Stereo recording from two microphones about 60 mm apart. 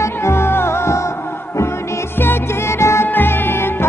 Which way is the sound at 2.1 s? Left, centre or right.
Left.